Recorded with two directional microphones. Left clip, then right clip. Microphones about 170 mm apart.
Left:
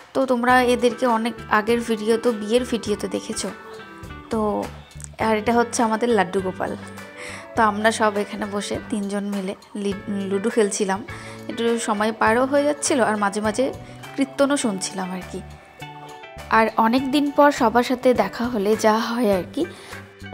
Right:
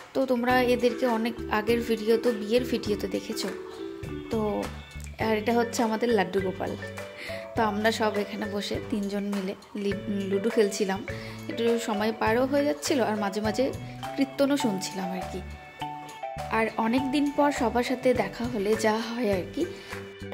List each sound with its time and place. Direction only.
0.1 s a woman's voice: 10° left (ahead or behind)
5.2 s a woman's voice: 10° left (ahead or behind)
16.4 s a woman's voice: 20° left (ahead or behind)